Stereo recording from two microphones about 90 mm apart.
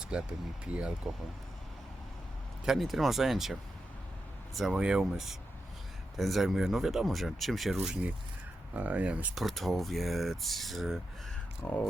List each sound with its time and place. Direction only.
0.0 s speech: 10° right (ahead or behind)
2.6 s speech: centre (ahead or behind)
4.7 s speech: 10° right (ahead or behind)
8.7 s speech: 15° right (ahead or behind)
9.3 s speech: centre (ahead or behind)
11.6 s speech: 15° left (ahead or behind)